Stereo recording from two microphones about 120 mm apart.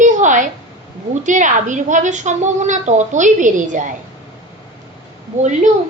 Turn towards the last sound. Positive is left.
turn(degrees=-90)